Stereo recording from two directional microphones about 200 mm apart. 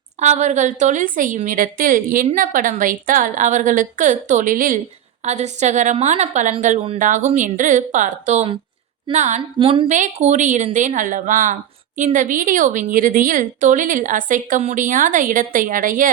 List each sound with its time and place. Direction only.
0.2 s a woman's voice: 35° right (ahead or behind)